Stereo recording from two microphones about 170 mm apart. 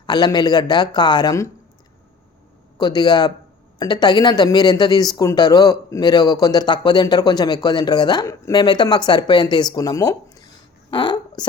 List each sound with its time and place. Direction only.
0.0 s a man's voice: 25° left (ahead or behind)
2.7 s a man's voice: 25° left (ahead or behind)
10.9 s a sound: 25° left (ahead or behind)